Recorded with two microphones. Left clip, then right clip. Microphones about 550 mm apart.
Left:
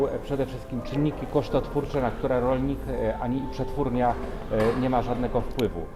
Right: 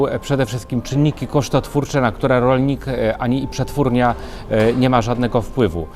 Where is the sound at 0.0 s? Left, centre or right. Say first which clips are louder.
Right 8 dB; right.